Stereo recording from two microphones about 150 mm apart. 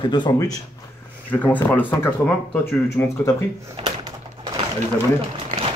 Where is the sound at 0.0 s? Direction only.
30° left (ahead or behind).